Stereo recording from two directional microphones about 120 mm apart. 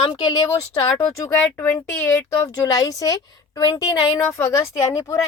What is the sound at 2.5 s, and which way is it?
A woman's voice, 30° left (ahead or behind).